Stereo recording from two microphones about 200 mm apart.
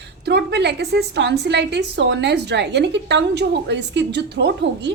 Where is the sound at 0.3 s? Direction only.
60° right (ahead or behind).